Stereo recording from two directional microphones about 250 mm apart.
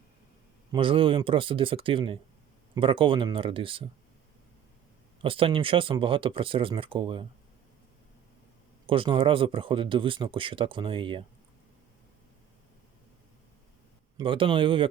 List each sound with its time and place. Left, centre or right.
0.7 s speech: right
5.2 s speech: right
8.9 s speech: right
14.2 s speech: centre